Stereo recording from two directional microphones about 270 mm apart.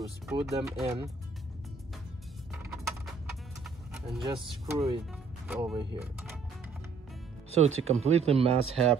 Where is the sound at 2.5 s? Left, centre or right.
Centre.